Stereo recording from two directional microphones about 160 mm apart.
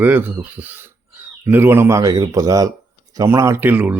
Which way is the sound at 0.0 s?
10° right (ahead or behind).